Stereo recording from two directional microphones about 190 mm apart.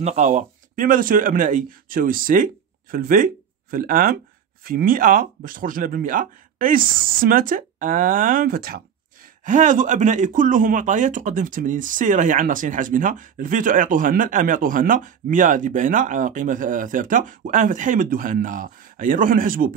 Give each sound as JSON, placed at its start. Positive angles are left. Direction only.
{"t": 0.0, "sound": "speech", "side_deg": -40}